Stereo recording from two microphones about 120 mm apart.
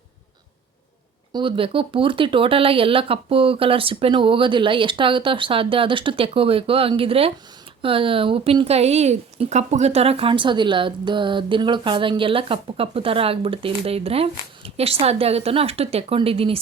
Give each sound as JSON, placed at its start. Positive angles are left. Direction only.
{"t": 1.3, "sound": "speech", "side_deg": -40}